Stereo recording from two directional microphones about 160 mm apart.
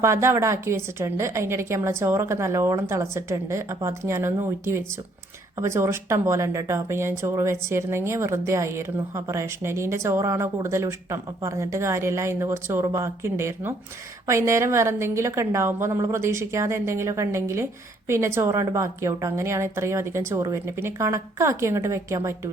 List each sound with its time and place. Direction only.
0.0 s speech: 15° right (ahead or behind)